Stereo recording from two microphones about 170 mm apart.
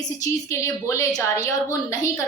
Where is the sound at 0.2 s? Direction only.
15° left (ahead or behind).